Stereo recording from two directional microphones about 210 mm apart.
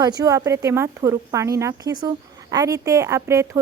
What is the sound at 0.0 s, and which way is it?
Speech, 20° right (ahead or behind).